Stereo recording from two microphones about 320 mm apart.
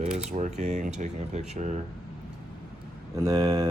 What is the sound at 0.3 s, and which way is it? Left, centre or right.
Speech, right.